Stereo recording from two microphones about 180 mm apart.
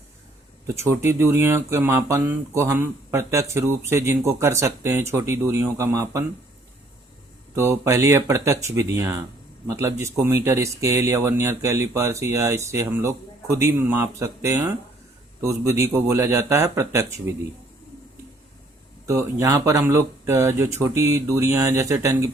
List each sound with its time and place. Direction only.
0.8 s speech: 15° right (ahead or behind)
7.5 s speech: 15° right (ahead or behind)
19.0 s speech: 15° right (ahead or behind)